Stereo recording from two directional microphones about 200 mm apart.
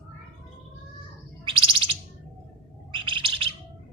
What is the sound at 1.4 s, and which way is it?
Bird, 25° right (ahead or behind).